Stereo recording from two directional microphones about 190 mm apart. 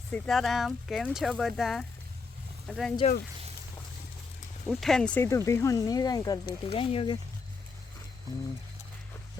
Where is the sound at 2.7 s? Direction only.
Centre (ahead or behind).